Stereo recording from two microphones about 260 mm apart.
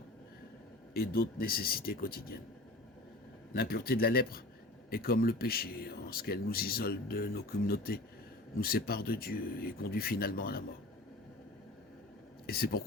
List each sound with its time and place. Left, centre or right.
0.9 s speech: left
3.5 s speech: left
12.5 s speech: left